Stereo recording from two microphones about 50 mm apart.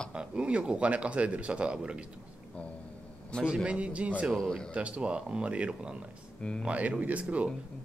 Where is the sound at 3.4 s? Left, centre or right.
Right.